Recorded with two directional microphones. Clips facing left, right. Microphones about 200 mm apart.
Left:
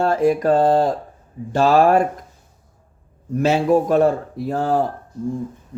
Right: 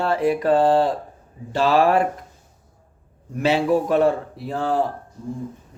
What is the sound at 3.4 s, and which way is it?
Speech, 45° left (ahead or behind).